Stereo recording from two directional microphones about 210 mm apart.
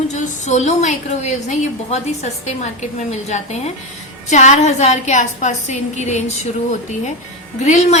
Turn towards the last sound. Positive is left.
turn(degrees=35)  # may be behind; listen again after turning